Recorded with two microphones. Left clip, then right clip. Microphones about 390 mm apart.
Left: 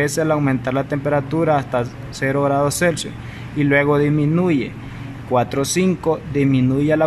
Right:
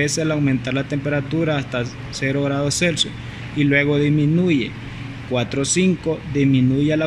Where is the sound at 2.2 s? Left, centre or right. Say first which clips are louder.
Left 2 dB; left.